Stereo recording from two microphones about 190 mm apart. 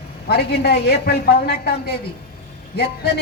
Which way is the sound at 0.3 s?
60° left (ahead or behind).